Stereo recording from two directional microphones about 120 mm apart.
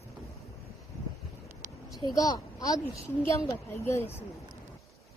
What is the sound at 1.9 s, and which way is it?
A child's voice, 30° left (ahead or behind).